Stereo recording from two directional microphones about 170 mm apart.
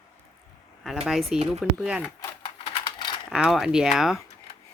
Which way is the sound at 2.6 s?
30° left (ahead or behind).